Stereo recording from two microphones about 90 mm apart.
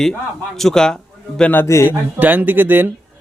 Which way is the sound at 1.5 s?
25° left (ahead or behind).